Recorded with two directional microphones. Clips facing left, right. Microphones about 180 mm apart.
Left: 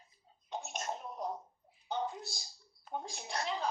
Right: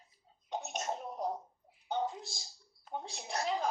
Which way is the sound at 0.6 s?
40° right (ahead or behind).